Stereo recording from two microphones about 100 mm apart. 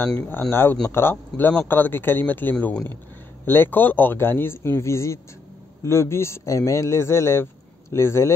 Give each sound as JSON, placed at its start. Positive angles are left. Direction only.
{"t": 0.0, "sound": "speech", "side_deg": 20}